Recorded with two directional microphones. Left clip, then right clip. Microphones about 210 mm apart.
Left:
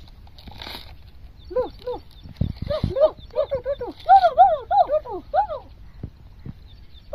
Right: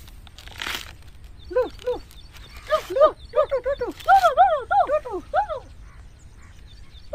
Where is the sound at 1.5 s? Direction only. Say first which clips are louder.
Right 2 dB; 15° right (ahead or behind).